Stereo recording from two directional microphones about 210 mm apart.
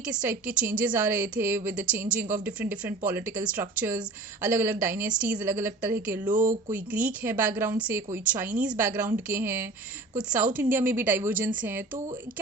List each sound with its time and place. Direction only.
0.0 s speech: 5° right (ahead or behind)
6.3 s speech: 40° right (ahead or behind)
6.7 s speech: 10° right (ahead or behind)